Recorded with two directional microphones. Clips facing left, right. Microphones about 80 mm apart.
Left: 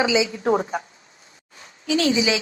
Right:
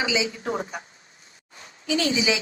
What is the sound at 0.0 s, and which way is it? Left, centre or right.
Speech, left.